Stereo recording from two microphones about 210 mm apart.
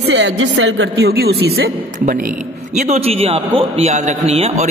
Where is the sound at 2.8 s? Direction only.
30° right (ahead or behind).